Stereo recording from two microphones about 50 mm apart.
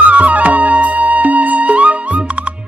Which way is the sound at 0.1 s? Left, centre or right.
Right.